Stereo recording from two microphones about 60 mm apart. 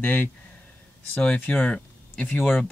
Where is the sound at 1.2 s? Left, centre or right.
Left.